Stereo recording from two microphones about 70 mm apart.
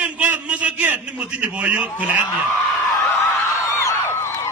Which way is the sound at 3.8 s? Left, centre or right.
Left.